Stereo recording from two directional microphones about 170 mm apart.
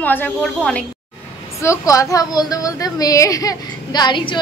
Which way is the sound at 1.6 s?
20° left (ahead or behind).